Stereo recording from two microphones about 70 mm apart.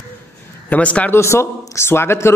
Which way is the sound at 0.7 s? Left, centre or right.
Centre.